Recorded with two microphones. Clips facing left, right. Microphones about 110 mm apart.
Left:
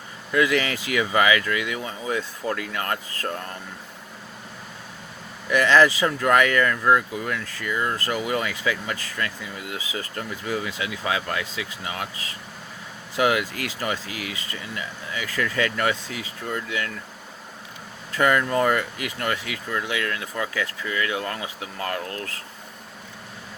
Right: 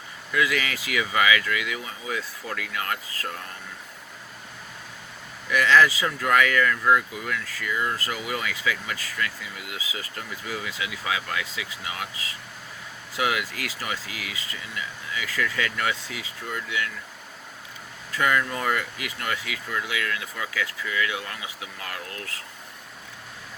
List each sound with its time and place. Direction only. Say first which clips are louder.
0.3 s speech: left 4 dB; 35° left (ahead or behind)
5.5 s speech: left 2 dB; 25° left (ahead or behind)
13.1 s speech: left 5 dB; 35° left (ahead or behind)
18.2 s speech: left 5 dB; 30° left (ahead or behind)